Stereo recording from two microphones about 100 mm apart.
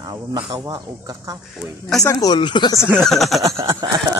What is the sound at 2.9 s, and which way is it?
Speech, 5° left (ahead or behind).